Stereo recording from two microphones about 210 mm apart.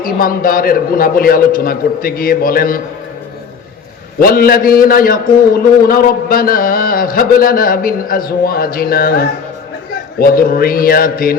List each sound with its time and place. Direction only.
0.0 s a man's voice: 45° left (ahead or behind)
4.2 s a man's voice: 45° left (ahead or behind)